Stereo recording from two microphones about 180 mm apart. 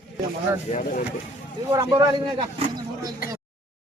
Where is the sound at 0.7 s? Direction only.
35° left (ahead or behind).